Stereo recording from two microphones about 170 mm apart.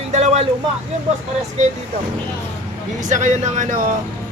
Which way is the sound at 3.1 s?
45° right (ahead or behind).